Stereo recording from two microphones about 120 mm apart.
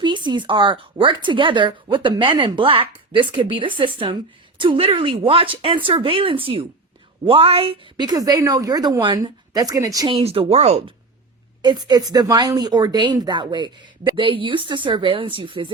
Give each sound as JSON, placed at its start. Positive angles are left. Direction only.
{"t": 0.0, "sound": "a woman's voice", "side_deg": -40}
{"t": 10.1, "sound": "speech", "side_deg": -55}
{"t": 11.6, "sound": "a woman's voice", "side_deg": -35}